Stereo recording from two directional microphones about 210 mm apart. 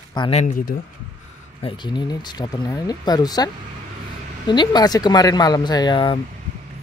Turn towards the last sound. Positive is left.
turn(degrees=25)  # may be behind; listen again after turning